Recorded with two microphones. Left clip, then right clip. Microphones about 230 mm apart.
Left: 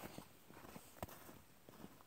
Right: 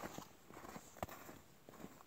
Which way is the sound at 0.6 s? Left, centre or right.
Centre.